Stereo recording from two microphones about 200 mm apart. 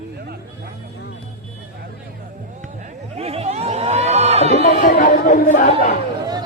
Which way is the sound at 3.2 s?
30° right (ahead or behind).